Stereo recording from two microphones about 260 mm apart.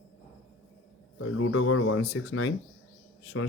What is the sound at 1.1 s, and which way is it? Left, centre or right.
A man's voice, left.